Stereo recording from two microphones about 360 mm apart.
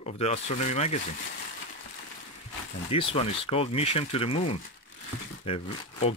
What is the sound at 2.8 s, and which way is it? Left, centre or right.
Speech, centre.